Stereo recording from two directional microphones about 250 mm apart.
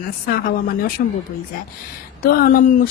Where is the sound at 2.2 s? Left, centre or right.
Left.